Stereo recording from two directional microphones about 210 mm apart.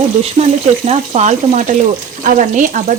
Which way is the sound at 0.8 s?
30° right (ahead or behind).